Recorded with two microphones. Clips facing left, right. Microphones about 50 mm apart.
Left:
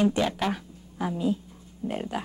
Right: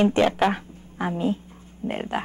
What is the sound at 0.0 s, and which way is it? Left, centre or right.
A woman's voice, right.